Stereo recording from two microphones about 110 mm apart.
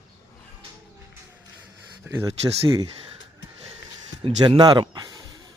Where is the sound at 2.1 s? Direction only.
20° right (ahead or behind).